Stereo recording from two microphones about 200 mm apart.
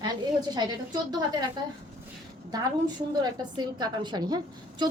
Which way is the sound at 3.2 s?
20° right (ahead or behind).